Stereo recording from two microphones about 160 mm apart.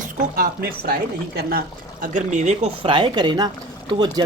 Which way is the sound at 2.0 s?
50° right (ahead or behind).